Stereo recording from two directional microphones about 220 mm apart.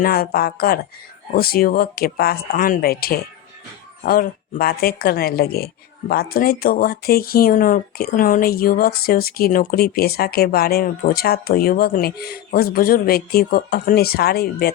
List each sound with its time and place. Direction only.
0.0 s speech: 40° left (ahead or behind)